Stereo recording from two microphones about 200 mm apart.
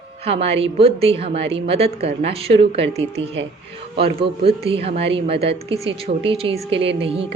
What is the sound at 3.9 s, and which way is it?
A woman's voice, 30° right (ahead or behind).